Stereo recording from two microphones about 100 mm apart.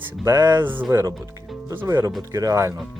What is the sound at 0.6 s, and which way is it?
Speech, 20° right (ahead or behind).